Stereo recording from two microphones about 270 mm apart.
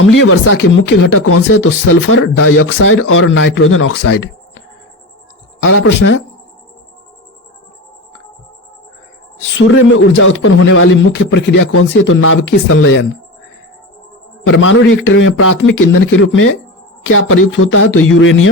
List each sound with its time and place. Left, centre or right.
0.0 s speech: left
5.6 s speech: left
9.6 s speech: left
14.4 s speech: left